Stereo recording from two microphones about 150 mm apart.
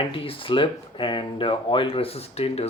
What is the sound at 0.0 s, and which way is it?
Speech, 35° left (ahead or behind).